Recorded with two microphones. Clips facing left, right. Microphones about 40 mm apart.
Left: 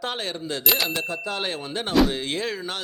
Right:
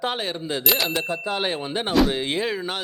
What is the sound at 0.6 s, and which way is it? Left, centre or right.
Speech, centre.